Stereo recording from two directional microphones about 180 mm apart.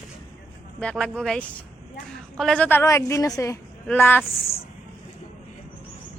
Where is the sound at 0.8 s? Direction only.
5° left (ahead or behind).